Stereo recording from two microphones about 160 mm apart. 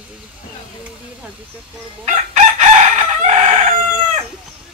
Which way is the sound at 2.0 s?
50° right (ahead or behind).